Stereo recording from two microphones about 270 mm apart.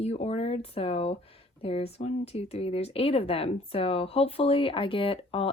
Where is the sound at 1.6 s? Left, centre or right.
Left.